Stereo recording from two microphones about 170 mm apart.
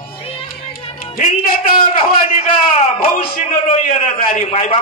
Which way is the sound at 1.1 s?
50° left (ahead or behind).